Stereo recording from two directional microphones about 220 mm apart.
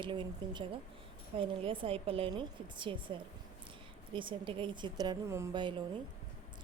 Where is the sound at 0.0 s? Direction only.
20° right (ahead or behind).